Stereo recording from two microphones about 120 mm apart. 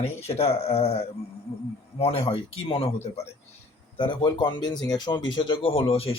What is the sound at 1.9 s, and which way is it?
Speech, 50° left (ahead or behind).